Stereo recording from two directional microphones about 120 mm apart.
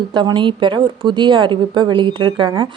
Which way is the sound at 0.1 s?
40° right (ahead or behind).